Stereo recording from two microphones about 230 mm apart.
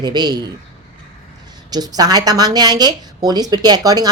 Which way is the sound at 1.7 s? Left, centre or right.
Centre.